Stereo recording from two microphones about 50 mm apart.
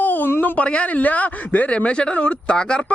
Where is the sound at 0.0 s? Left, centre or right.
Left.